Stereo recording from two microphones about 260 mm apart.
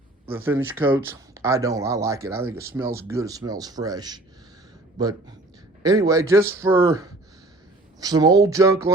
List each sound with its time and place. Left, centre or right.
0.3 s speech: centre